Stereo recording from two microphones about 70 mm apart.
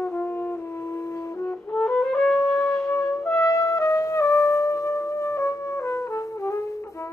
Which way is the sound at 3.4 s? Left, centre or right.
Left.